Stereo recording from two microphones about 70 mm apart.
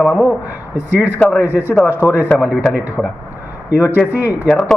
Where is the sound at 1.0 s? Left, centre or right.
Right.